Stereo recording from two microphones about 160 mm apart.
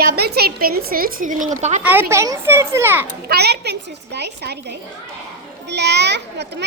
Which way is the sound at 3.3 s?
90° right.